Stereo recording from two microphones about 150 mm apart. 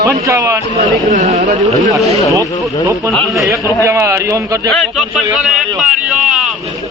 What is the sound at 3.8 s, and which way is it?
Speech, 20° right (ahead or behind).